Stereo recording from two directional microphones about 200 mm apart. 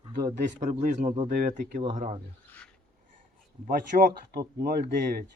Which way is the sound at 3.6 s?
45° right (ahead or behind).